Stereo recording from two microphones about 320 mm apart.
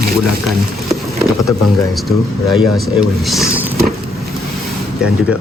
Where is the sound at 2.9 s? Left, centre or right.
Centre.